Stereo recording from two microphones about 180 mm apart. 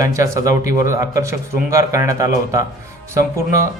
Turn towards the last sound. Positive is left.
turn(degrees=-15)  # may be behind; listen again after turning